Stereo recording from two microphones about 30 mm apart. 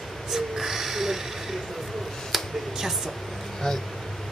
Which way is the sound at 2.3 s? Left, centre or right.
Centre.